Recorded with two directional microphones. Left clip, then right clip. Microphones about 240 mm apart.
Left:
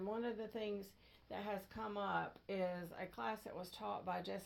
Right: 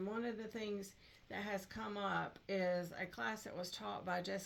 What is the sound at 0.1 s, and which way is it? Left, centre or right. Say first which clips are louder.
Speech: even; right.